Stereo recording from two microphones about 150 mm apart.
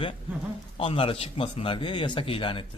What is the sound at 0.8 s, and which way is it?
Speech, 35° left (ahead or behind).